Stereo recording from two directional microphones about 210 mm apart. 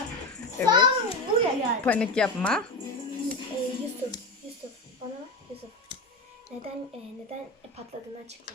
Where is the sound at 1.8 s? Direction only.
5° left (ahead or behind).